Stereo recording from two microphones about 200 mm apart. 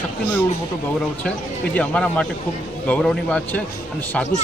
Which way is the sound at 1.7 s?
5° left (ahead or behind).